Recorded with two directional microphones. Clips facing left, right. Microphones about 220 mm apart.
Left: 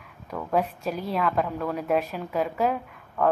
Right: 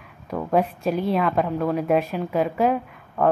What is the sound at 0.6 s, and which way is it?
Speech, 25° right (ahead or behind).